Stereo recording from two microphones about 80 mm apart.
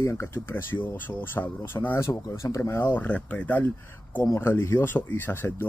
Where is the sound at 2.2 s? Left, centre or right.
Left.